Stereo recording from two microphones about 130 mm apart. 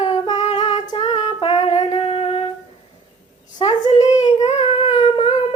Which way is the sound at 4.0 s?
65° left (ahead or behind).